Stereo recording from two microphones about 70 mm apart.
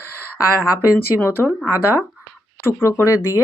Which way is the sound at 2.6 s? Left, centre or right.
Left.